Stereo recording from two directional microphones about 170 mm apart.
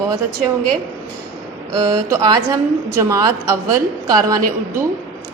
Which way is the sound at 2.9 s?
20° right (ahead or behind).